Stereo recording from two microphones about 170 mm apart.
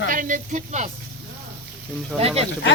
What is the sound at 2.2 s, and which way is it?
Speech, 35° right (ahead or behind).